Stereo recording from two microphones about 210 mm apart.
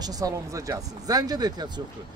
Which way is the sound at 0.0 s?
15° right (ahead or behind).